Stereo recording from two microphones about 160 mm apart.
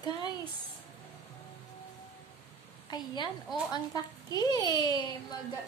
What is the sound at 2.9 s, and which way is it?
A child's voice, 25° left (ahead or behind).